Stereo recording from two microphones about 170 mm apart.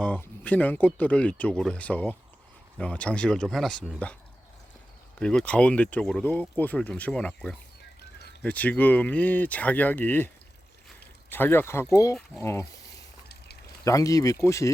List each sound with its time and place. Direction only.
0.0 s speech: 10° left (ahead or behind)
5.2 s speech: 5° left (ahead or behind)
13.8 s speech: 20° left (ahead or behind)